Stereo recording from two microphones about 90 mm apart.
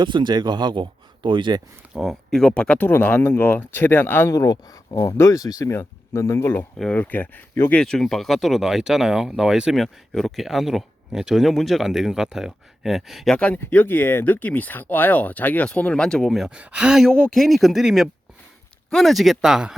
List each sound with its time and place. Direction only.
0.0 s speech: 60° right (ahead or behind)
2.0 s speech: 5° left (ahead or behind); by 4.3 s 25° left (ahead or behind)
4.3 s speech: 40° left (ahead or behind); by 7.8 s 20° left (ahead or behind)
7.8 s speech: 5° left (ahead or behind)
13.3 s speech: 15° left (ahead or behind)
16.6 s speech: 10° right (ahead or behind)
17.1 s speech: 5° left (ahead or behind)